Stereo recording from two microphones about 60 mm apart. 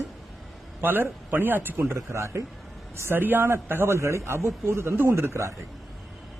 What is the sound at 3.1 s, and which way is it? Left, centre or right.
A man's voice, right.